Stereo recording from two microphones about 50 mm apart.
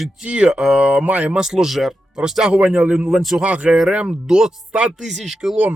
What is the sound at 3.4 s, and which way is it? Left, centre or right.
Speech, right.